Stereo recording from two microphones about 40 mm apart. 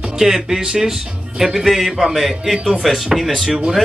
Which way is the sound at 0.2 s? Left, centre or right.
Centre.